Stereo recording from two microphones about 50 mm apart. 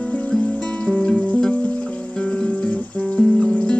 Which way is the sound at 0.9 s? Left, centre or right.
Centre.